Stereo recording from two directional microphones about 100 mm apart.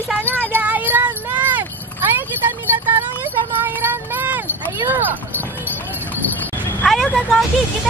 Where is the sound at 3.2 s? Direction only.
20° right (ahead or behind).